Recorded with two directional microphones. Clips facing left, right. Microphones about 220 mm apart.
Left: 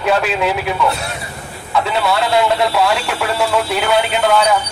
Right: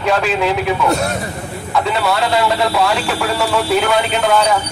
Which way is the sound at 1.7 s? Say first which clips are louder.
Even; centre (ahead or behind).